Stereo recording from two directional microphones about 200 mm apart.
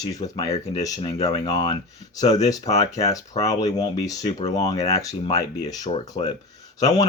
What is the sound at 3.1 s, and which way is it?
Speech, 15° left (ahead or behind).